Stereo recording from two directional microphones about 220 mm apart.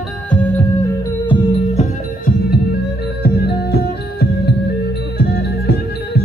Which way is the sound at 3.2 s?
50° left (ahead or behind).